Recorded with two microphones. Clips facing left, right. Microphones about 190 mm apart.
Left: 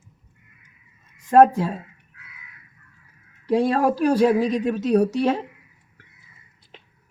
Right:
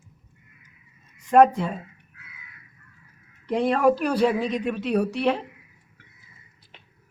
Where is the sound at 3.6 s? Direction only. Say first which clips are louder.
Right 1 dB; 40° left (ahead or behind).